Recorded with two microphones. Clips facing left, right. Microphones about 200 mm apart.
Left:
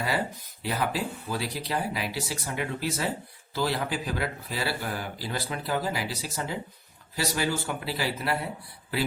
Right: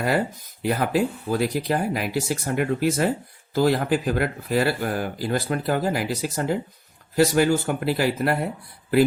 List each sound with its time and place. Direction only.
0.6 s speech: 50° right (ahead or behind)